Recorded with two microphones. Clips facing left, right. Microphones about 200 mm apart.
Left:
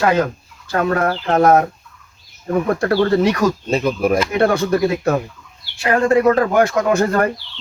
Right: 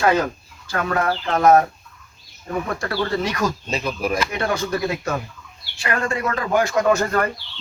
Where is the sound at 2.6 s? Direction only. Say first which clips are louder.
Left 10 dB; 50° left (ahead or behind).